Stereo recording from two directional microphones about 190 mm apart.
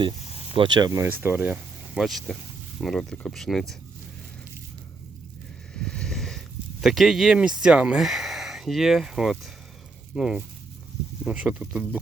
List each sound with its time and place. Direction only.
0.2 s a sound: 35° left (ahead or behind)
0.5 s speech: 25° right (ahead or behind)
2.0 s speech: centre (ahead or behind)
5.7 s vehicle: 5° left (ahead or behind)
6.8 s speech: centre (ahead or behind)